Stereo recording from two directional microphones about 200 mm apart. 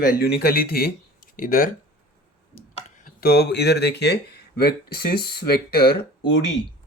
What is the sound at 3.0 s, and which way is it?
Speech, 50° left (ahead or behind).